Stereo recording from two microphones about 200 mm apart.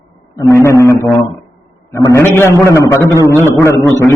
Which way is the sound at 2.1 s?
10° left (ahead or behind).